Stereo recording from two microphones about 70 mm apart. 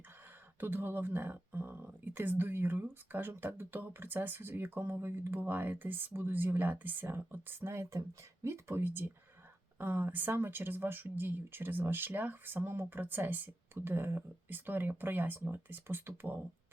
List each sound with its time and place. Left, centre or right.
0.6 s speech: right